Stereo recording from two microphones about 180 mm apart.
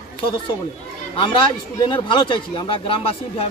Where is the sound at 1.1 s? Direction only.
25° left (ahead or behind).